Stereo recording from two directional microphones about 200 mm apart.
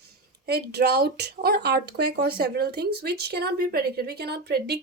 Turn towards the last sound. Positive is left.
turn(degrees=-55)  # may be behind; listen again after turning